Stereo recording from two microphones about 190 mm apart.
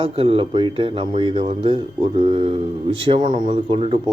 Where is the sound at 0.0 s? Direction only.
30° right (ahead or behind).